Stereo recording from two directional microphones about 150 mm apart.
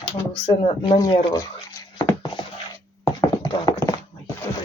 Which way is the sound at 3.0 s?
30° left (ahead or behind).